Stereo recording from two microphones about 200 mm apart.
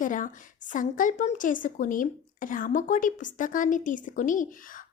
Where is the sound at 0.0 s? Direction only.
40° left (ahead or behind).